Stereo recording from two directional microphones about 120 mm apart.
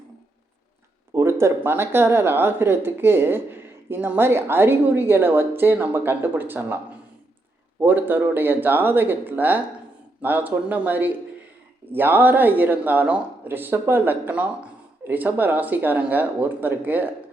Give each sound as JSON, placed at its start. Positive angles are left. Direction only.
{"t": 1.1, "sound": "speech", "side_deg": -20}
{"t": 7.8, "sound": "a woman's voice", "side_deg": -15}